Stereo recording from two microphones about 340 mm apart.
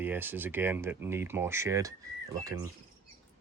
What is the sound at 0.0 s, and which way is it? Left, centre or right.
Speech, centre.